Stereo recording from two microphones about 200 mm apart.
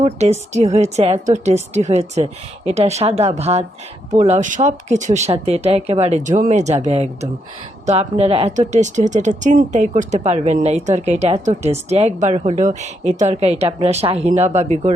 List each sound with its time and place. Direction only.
0.0 s speech: 35° right (ahead or behind)